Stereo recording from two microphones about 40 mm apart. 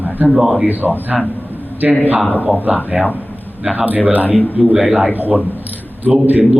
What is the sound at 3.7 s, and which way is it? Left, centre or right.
A man's voice, right.